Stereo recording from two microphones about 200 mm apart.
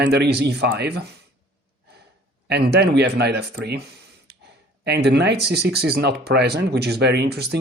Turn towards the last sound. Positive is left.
turn(degrees=-55)  # may be behind; listen again after turning